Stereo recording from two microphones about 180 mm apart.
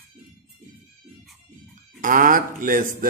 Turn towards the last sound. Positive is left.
turn(degrees=-50)  # may be behind; listen again after turning